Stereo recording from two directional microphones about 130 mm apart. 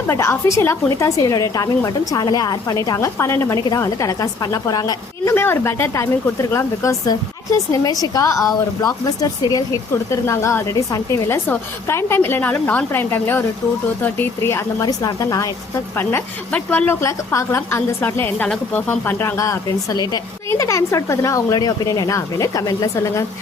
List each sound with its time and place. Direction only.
0.1 s a woman's voice: 20° left (ahead or behind)
5.3 s a woman's voice: 20° left (ahead or behind)
16.0 s a woman's voice: 15° left (ahead or behind)